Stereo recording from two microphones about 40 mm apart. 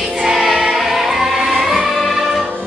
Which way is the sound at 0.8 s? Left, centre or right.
Centre.